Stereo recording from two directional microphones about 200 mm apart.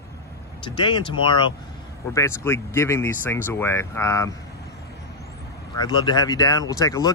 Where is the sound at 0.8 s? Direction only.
25° left (ahead or behind).